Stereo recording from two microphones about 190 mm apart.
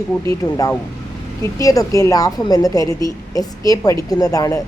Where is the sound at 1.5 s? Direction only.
20° left (ahead or behind).